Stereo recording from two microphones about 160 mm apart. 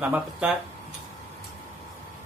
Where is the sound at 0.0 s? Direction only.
5° right (ahead or behind).